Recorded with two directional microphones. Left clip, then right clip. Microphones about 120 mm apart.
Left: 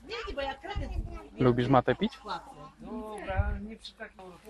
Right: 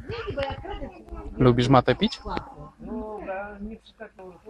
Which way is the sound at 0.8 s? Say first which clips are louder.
Right 5 dB; 30° left (ahead or behind).